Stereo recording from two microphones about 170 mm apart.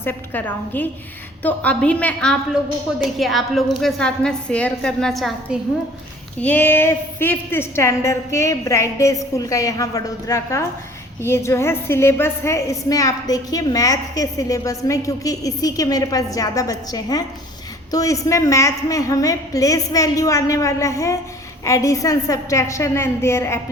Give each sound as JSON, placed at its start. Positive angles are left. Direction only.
{"t": 0.0, "sound": "a woman's voice", "side_deg": 10}